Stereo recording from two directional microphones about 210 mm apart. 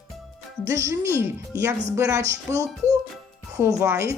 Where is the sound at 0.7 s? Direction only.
15° right (ahead or behind).